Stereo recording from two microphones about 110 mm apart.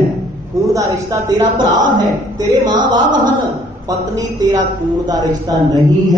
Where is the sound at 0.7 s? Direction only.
30° right (ahead or behind).